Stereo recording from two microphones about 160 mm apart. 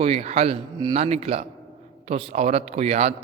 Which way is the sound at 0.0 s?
40° right (ahead or behind).